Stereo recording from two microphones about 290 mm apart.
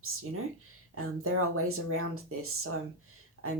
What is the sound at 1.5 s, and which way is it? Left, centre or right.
Speech, right.